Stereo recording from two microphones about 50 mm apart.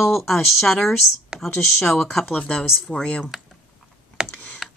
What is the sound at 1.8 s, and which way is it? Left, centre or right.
Speech, centre.